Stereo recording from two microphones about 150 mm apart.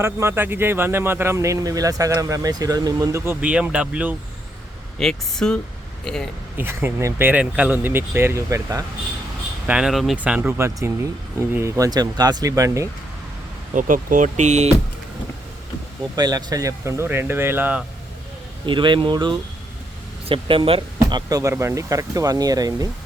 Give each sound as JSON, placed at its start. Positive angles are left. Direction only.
{"t": 0.0, "sound": "speech", "side_deg": -15}
{"t": 4.9, "sound": "speech", "side_deg": 5}
{"t": 6.6, "sound": "speech", "side_deg": -15}
{"t": 9.6, "sound": "speech", "side_deg": -5}
{"t": 13.7, "sound": "speech", "side_deg": -60}
{"t": 16.1, "sound": "speech", "side_deg": -25}
{"t": 18.6, "sound": "speech", "side_deg": -30}